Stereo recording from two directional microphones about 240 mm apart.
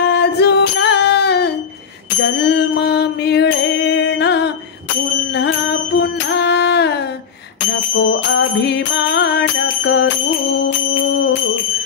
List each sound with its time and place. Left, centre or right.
0.0 s music: left
2.2 s mantra: left
5.3 s music: left